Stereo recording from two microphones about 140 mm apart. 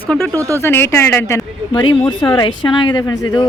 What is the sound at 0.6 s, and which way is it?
Speech, 15° left (ahead or behind).